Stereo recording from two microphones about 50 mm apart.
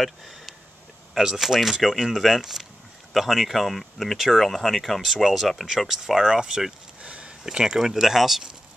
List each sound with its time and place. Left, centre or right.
1.1 s speech: centre
7.0 s a sound: right
7.4 s speech: centre